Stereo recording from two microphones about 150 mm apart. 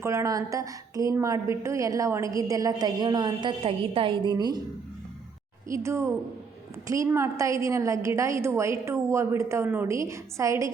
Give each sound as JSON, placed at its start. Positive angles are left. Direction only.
{"t": 0.0, "sound": "a woman's voice", "side_deg": -20}
{"t": 5.6, "sound": "a woman's voice", "side_deg": -20}